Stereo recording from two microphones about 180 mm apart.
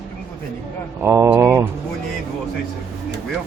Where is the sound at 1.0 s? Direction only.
15° right (ahead or behind).